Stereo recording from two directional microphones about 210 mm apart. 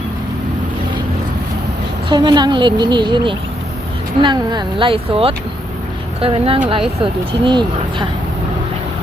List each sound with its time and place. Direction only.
2.0 s a woman's voice: 20° right (ahead or behind)